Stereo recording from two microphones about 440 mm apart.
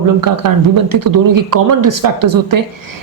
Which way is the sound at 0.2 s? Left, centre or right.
Right.